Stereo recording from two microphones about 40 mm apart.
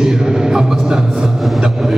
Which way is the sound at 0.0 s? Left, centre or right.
Centre.